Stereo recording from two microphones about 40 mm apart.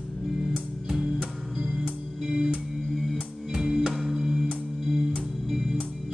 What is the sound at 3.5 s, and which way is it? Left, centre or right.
Music, centre.